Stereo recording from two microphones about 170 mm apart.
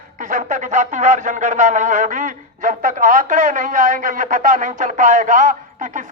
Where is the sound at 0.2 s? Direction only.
50° right (ahead or behind).